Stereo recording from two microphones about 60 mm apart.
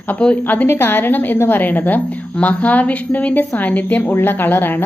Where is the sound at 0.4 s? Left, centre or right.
Left.